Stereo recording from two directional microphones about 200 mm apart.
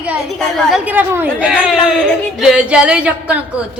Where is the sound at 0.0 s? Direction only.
Centre (ahead or behind).